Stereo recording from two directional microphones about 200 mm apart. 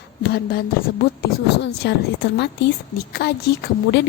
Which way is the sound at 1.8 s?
55° left (ahead or behind).